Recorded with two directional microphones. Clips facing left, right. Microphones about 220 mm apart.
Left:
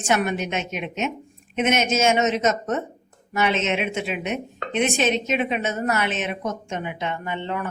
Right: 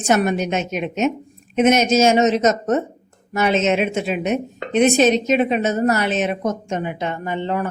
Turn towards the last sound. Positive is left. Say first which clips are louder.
# right 5 dB
turn(degrees=-40)  # may be behind; listen again after turning